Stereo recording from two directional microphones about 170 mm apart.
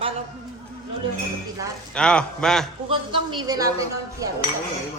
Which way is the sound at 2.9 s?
30° right (ahead or behind).